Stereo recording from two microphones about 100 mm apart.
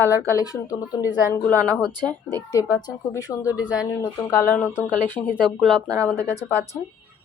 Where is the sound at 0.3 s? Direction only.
35° left (ahead or behind).